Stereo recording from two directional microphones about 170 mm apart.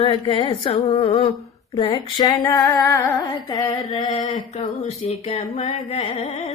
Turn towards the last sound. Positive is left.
turn(degrees=35)  # may be behind; listen again after turning